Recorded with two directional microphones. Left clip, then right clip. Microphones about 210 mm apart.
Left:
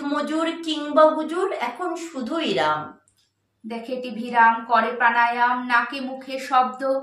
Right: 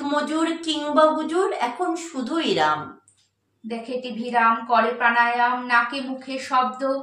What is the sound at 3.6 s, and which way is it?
A woman's voice, 15° left (ahead or behind).